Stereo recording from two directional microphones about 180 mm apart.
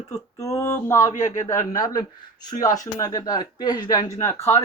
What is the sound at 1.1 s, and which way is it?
Speech, 45° left (ahead or behind).